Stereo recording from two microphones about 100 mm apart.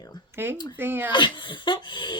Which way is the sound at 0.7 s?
20° right (ahead or behind).